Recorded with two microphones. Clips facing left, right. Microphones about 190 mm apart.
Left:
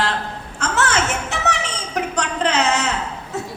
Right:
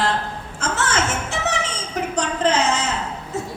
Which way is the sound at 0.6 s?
65° left (ahead or behind).